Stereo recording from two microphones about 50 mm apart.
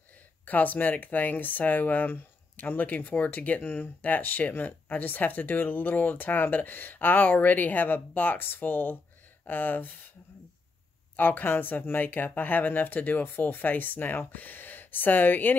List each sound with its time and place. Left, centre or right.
0.5 s speech: left
11.1 s speech: left